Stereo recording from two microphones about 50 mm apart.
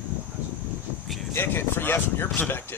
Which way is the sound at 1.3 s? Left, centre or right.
Left.